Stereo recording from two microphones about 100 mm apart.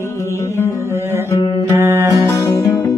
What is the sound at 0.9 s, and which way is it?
Music, 25° right (ahead or behind).